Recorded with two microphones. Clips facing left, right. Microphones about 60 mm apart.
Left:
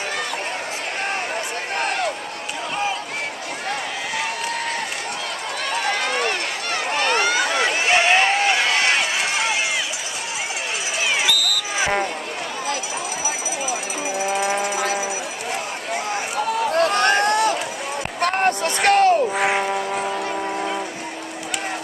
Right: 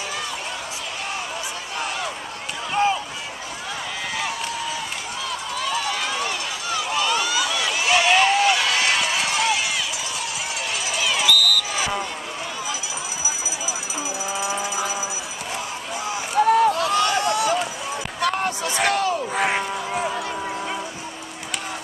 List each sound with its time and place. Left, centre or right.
1.8 s run: left
5.7 s run: left
11.0 s a sound: left
11.2 s a sound: centre
14.1 s vehicle: left
16.3 s run: right
16.7 s run: left
18.2 s a sound: left
19.5 s vehicle: left